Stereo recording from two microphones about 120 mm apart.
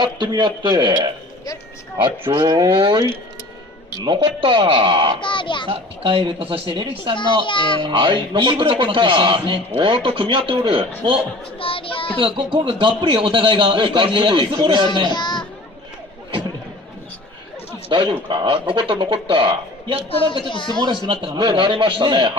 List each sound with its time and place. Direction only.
0.0 s a man's voice: 40° right (ahead or behind)
2.3 s a man's voice: 40° right (ahead or behind)
5.2 s a child's voice: 45° left (ahead or behind)
5.6 s a man's voice: 45° right (ahead or behind)
7.2 s a child's voice: 45° left (ahead or behind)
7.8 s a man's voice: 45° right (ahead or behind)
11.6 s a child's voice: 50° left (ahead or behind)
12.2 s a man's voice: 45° right (ahead or behind)
15.1 s children playing: 40° left (ahead or behind)
17.8 s a man's voice: 45° right (ahead or behind)
20.5 s speech: 40° left (ahead or behind)
21.1 s a man's voice: 40° right (ahead or behind)